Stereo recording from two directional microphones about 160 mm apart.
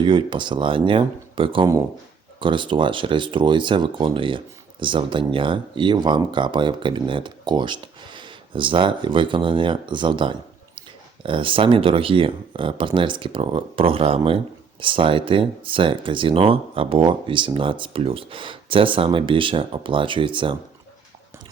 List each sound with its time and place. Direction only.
0.0 s speech: 30° right (ahead or behind)